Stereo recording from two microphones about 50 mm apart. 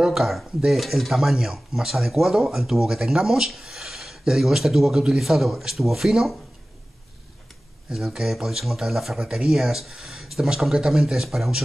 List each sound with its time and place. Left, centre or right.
0.0 s speech: centre
7.9 s speech: centre